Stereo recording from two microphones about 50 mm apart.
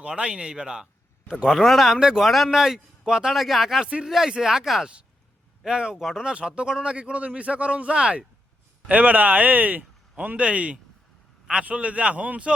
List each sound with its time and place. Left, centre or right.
0.0 s a man's voice: right
1.5 s speech: centre
2.0 s a man's voice: centre
2.2 s a man's voice: centre
3.3 s a man's voice: centre
5.6 s a man's voice: centre
6.2 s a man's voice: centre
8.9 s a man's voice: right